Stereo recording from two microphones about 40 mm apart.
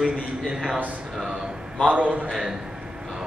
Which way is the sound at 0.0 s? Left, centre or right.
Centre.